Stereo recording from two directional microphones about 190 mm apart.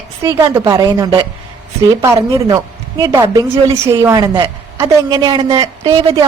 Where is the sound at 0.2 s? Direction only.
15° right (ahead or behind).